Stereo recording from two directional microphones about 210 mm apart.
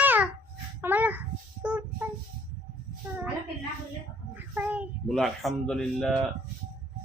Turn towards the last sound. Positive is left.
turn(degrees=0)  # may be behind; listen again after turning